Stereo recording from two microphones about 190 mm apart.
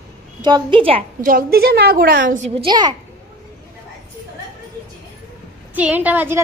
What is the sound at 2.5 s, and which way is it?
Speech, 25° right (ahead or behind).